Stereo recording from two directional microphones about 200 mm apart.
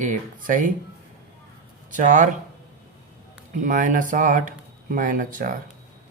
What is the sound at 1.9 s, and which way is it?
Speech, 40° right (ahead or behind).